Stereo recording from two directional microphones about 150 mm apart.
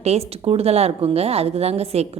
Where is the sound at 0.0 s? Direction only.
45° right (ahead or behind).